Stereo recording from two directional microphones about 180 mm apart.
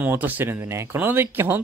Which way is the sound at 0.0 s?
10° right (ahead or behind).